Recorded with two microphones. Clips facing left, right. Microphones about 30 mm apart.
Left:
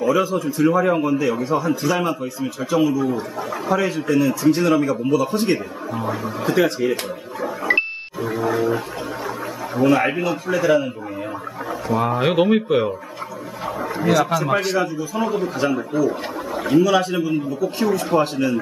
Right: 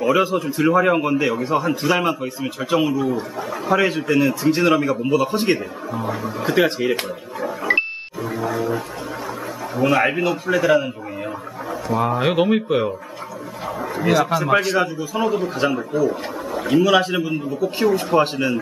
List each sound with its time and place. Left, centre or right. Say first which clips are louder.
0.0 s a man's voice: right 1 dB; right
3.7 s speech: right 2 dB; right
5.9 s speech: even; centre
6.5 s speech: even; right
7.4 s music: even; centre
9.8 s speech: even; centre
11.9 s speech: even; centre
14.0 s speech: even; centre
14.8 s speech: right 1 dB; right
15.2 s speech: right 2 dB; centre
16.1 s a sound: even; centre
16.7 s speech: even; right